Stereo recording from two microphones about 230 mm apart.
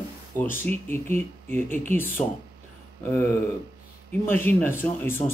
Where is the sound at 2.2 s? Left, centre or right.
Left.